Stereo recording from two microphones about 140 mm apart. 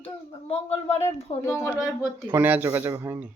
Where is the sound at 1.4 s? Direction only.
20° left (ahead or behind).